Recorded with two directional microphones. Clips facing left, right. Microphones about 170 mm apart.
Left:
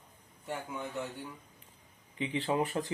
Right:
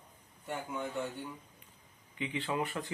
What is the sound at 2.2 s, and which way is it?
Speech, 35° left (ahead or behind).